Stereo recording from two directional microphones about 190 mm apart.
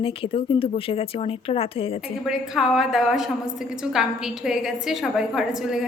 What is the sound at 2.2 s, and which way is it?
A woman's voice, centre (ahead or behind).